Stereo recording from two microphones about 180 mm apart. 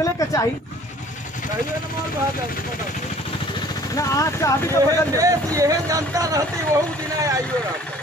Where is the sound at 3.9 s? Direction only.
20° left (ahead or behind).